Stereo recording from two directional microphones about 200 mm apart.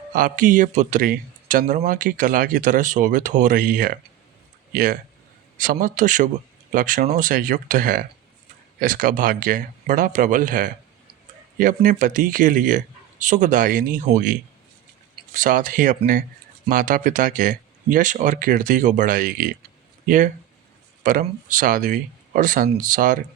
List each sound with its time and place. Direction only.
0.1 s a man's voice: 40° right (ahead or behind)